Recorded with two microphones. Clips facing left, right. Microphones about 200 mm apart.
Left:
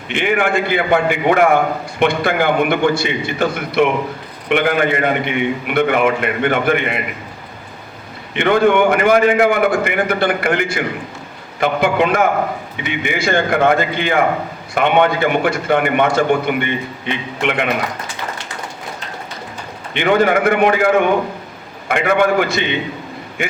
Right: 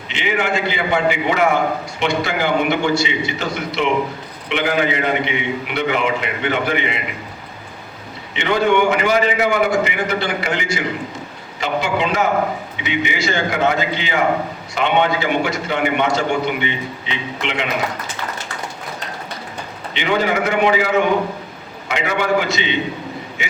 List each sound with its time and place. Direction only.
0.1 s a man's voice: 55° left (ahead or behind)
8.3 s a man's voice: 55° left (ahead or behind)
19.9 s a man's voice: 55° left (ahead or behind)